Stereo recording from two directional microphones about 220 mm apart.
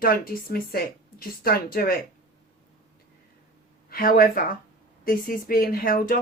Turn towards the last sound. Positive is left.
turn(degrees=40)  # may be behind; listen again after turning